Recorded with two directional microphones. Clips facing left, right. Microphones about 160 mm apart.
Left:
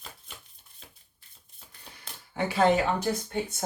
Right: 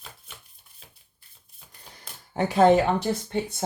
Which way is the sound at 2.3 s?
45° right (ahead or behind).